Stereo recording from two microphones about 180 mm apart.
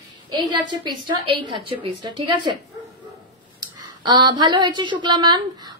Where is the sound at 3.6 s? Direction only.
25° right (ahead or behind).